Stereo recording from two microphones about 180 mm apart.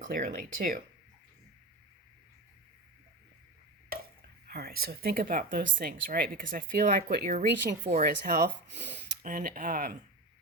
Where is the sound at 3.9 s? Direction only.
55° right (ahead or behind).